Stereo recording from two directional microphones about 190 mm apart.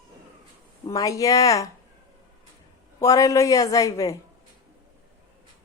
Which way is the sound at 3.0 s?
15° left (ahead or behind).